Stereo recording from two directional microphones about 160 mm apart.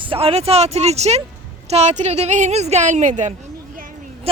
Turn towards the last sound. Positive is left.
turn(degrees=-50)  # may be behind; listen again after turning